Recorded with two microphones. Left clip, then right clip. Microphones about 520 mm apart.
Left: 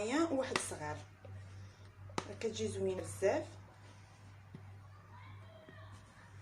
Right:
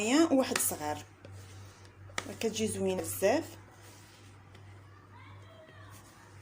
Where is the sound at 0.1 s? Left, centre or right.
Left.